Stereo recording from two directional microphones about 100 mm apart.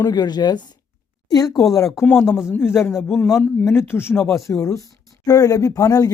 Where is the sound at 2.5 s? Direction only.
25° left (ahead or behind).